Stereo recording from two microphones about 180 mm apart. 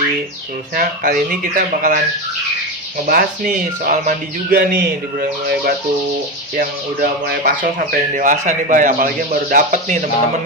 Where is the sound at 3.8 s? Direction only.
50° right (ahead or behind).